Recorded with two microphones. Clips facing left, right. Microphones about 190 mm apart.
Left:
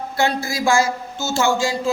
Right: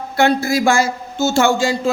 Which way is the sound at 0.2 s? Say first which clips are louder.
Right 6 dB; 60° right (ahead or behind).